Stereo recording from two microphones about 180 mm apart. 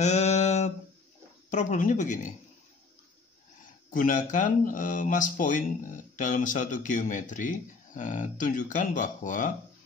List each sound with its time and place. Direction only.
0.0 s a sound: 40° left (ahead or behind)
1.5 s speech: 45° left (ahead or behind)
3.9 s speech: 45° left (ahead or behind)